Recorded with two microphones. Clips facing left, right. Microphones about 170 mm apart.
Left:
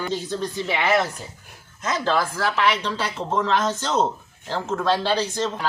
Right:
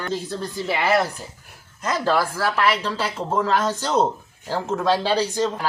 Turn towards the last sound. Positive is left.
turn(degrees=-10)  # may be behind; listen again after turning